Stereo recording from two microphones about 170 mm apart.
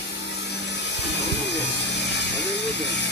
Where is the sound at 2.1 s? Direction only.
90° left.